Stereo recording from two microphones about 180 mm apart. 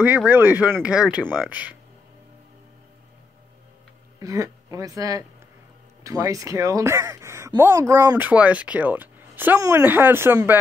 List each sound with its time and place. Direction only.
0.0 s speech: 10° right (ahead or behind)
4.2 s speech: 20° right (ahead or behind)